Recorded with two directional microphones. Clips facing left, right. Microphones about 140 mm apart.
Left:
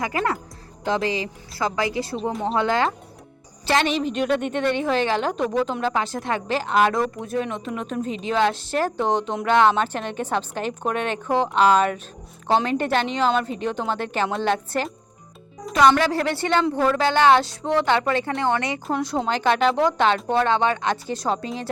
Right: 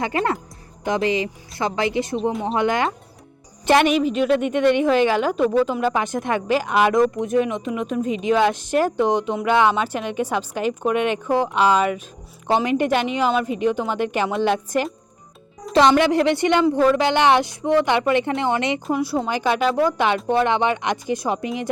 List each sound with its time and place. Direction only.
0.0 s a woman's voice: 25° right (ahead or behind)
4.0 s a woman's voice: 5° right (ahead or behind)
15.7 s a woman's voice: 25° right (ahead or behind)
18.9 s a woman's voice: 10° right (ahead or behind)